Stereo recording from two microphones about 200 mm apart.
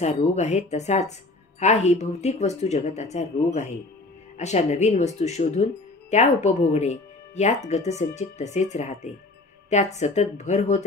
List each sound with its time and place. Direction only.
0.0 s speech: 35° left (ahead or behind)
4.4 s speech: 35° left (ahead or behind)